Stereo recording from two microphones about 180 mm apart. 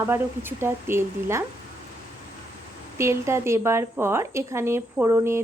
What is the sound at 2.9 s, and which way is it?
A woman's voice, 15° right (ahead or behind).